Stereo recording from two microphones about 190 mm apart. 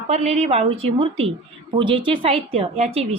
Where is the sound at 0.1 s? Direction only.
35° right (ahead or behind).